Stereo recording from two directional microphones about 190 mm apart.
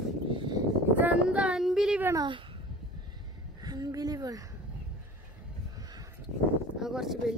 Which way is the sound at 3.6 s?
20° right (ahead or behind).